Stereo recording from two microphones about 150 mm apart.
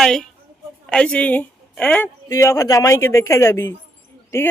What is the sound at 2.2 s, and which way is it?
Speech, 20° left (ahead or behind).